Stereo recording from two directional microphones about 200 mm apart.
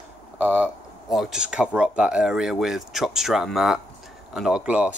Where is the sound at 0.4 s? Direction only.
10° right (ahead or behind).